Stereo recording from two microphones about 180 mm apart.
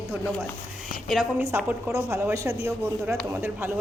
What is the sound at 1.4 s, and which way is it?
A woman's voice, 15° right (ahead or behind).